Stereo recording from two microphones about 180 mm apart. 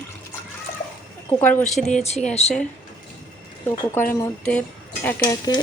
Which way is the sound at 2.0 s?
40° left (ahead or behind).